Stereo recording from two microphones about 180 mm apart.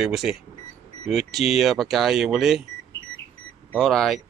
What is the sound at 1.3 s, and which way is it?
Speech, centre (ahead or behind).